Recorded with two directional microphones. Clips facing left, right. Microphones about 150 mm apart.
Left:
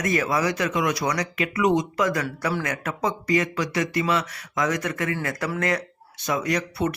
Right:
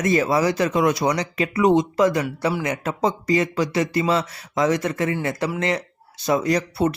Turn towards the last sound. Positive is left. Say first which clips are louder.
# right 4 dB
turn(degrees=-30)  # may be behind; listen again after turning